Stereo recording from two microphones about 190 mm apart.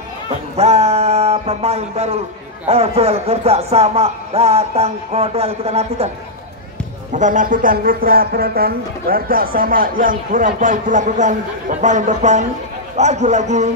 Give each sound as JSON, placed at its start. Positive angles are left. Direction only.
{"t": 0.6, "sound": "speech", "side_deg": -35}
{"t": 7.2, "sound": "speech", "side_deg": -40}